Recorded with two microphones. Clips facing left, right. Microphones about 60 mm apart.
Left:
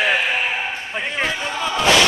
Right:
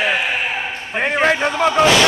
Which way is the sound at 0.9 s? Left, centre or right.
Right.